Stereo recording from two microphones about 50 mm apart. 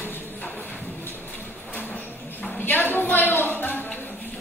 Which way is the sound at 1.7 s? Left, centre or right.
Left.